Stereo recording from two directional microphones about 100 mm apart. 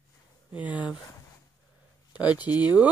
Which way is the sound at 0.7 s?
50° left (ahead or behind).